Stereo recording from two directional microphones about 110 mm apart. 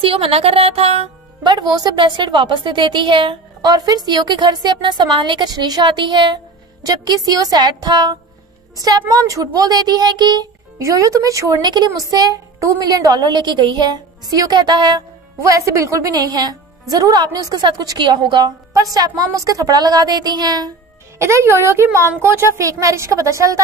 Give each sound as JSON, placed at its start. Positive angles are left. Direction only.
{"t": 0.0, "sound": "speech", "side_deg": -60}
{"t": 1.4, "sound": "a woman's voice", "side_deg": -40}
{"t": 3.6, "sound": "a woman's voice", "side_deg": -35}
{"t": 10.8, "sound": "a woman's voice", "side_deg": -30}
{"t": 11.6, "sound": "a woman's voice", "side_deg": -40}
{"t": 15.4, "sound": "a woman's voice", "side_deg": -30}
{"t": 18.7, "sound": "a woman's voice", "side_deg": -30}
{"t": 21.2, "sound": "a woman's voice", "side_deg": -25}